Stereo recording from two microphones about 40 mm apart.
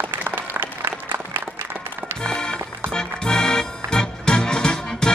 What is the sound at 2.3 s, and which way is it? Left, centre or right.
Music, left.